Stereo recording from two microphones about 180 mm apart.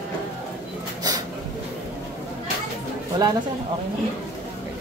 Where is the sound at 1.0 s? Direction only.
20° right (ahead or behind).